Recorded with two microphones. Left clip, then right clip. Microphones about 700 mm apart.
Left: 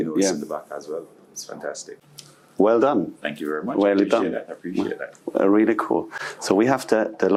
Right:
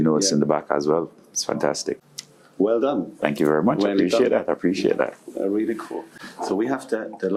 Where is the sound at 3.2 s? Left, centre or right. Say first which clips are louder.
Right 7 dB; right.